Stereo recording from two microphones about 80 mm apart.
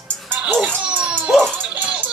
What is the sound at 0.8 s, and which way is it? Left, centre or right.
Speech, centre.